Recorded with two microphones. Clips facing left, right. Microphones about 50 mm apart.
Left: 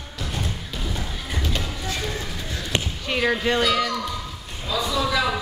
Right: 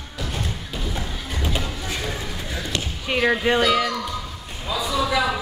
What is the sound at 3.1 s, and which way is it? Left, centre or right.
Speech, centre.